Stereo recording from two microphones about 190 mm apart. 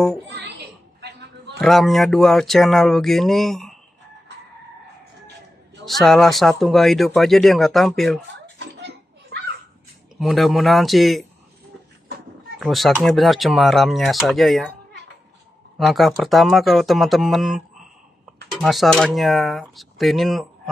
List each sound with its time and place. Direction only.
0.3 s chatter: 60° right (ahead or behind)
1.6 s speech: centre (ahead or behind)
5.9 s speech: centre (ahead or behind)
8.5 s a sound: 65° right (ahead or behind)
10.1 s speech: centre (ahead or behind)
12.5 s speech: centre (ahead or behind)
15.8 s speech: centre (ahead or behind)